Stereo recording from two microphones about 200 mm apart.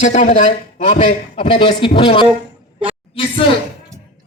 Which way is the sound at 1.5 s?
25° left (ahead or behind).